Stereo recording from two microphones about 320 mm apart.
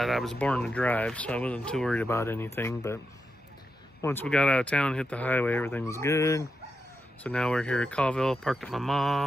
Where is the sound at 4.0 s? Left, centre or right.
Centre.